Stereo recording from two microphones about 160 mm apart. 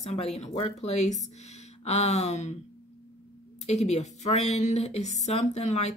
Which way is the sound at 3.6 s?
45° left (ahead or behind).